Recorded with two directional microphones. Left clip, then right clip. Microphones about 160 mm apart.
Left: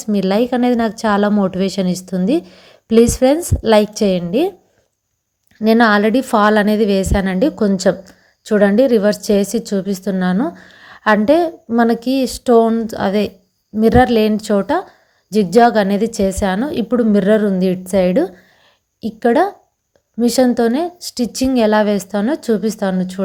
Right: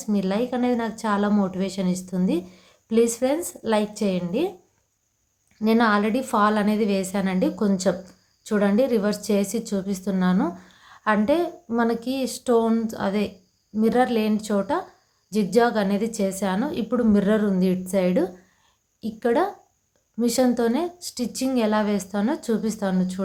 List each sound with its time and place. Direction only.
0.0 s a woman's voice: 45° left (ahead or behind)
5.6 s a woman's voice: 45° left (ahead or behind)